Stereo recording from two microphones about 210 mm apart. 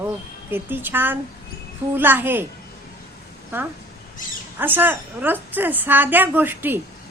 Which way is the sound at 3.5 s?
10° right (ahead or behind).